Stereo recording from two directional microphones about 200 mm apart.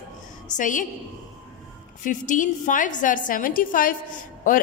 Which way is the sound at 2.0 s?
40° left (ahead or behind).